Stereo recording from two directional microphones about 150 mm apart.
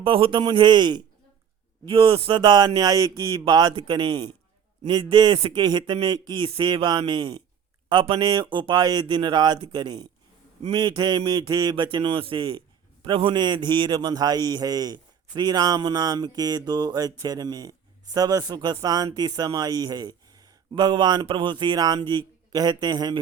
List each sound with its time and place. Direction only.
0.0 s a man's voice: 35° right (ahead or behind)